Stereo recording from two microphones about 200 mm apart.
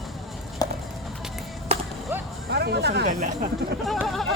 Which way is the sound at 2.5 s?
55° right (ahead or behind).